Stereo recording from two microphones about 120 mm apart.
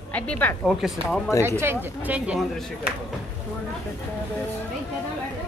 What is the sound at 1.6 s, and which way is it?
Speech, 20° right (ahead or behind).